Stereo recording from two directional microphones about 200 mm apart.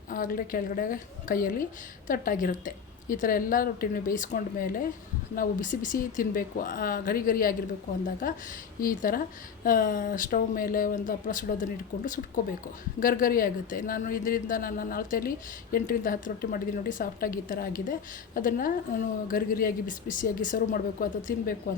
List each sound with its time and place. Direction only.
0.1 s a woman's voice: 45° left (ahead or behind)
13.0 s a woman's voice: 45° left (ahead or behind)